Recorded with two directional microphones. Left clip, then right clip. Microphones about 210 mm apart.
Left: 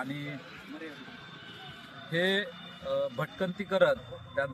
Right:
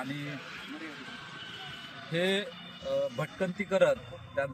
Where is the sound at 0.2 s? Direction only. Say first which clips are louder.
Right 2 dB; 45° left (ahead or behind).